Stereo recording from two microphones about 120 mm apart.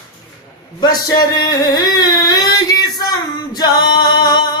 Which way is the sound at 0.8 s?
35° left (ahead or behind).